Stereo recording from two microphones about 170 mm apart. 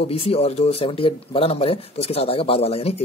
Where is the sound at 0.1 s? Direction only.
35° left (ahead or behind).